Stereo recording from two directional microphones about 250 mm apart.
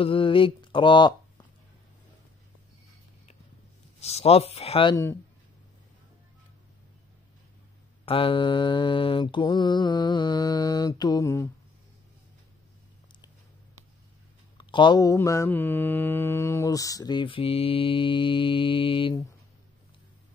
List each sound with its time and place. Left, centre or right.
0.0 s speech: left
4.0 s speech: left
8.0 s mantra: left
14.6 s mantra: centre